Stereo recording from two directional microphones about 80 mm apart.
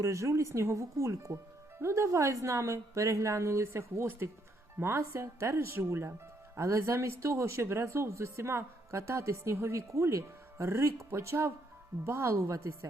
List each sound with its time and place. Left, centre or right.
0.0 s speech: right